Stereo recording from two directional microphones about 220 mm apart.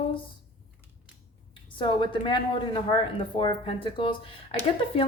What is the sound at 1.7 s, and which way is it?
Speech, 20° left (ahead or behind).